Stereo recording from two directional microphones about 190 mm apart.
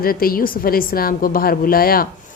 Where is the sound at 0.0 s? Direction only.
50° left (ahead or behind).